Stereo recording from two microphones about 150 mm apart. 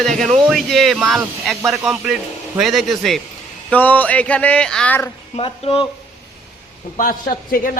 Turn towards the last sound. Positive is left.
turn(degrees=70)  # may be behind; listen again after turning